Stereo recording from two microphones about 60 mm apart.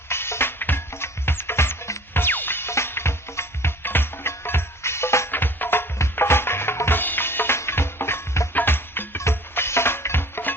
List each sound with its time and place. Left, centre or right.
0.1 s music: left
5.3 s music: left
8.5 s music: left